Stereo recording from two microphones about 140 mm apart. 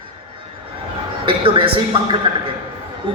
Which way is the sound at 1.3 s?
40° right (ahead or behind).